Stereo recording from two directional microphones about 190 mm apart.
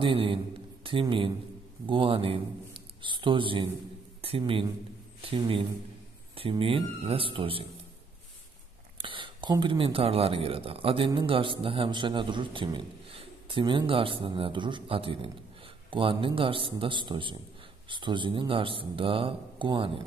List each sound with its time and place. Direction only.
0.0 s a man's voice: 25° right (ahead or behind)
8.9 s a man's voice: 25° right (ahead or behind)